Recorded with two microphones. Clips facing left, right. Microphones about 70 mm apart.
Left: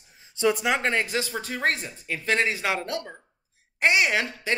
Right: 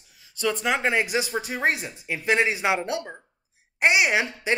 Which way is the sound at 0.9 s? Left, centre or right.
Centre.